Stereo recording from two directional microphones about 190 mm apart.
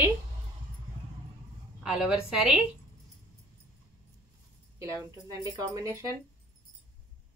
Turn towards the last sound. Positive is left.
turn(degrees=-15)  # may be behind; listen again after turning